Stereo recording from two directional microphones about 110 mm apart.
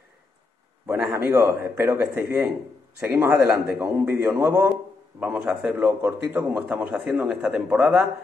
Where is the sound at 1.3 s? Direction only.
25° right (ahead or behind).